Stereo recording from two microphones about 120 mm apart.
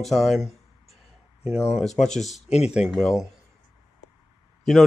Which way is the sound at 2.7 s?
5° right (ahead or behind).